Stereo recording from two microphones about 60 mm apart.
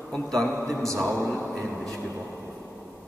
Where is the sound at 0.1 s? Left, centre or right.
Centre.